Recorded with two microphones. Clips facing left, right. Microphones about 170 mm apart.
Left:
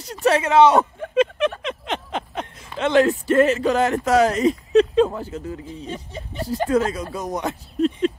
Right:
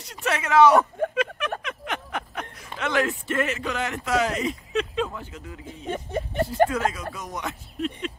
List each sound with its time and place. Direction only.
0.2 s speech: 30° left (ahead or behind)
1.1 s a sound: 25° left (ahead or behind)
3.1 s speech: 35° left (ahead or behind)
5.9 s speech: 55° right (ahead or behind)
6.7 s speech: 35° left (ahead or behind)